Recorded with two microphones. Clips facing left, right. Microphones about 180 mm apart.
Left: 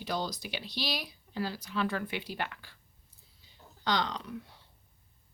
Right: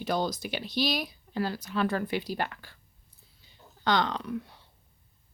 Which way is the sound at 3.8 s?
55° right (ahead or behind).